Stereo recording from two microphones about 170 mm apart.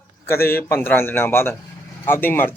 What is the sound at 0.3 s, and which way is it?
Speech, 15° left (ahead or behind).